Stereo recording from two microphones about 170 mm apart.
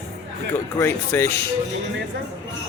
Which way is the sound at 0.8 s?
15° left (ahead or behind).